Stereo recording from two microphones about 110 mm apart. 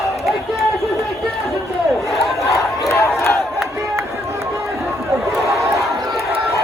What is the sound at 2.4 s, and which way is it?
Crowd, 25° left (ahead or behind).